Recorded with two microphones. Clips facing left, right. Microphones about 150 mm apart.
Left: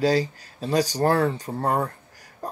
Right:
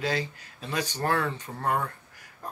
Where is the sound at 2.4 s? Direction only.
35° left (ahead or behind).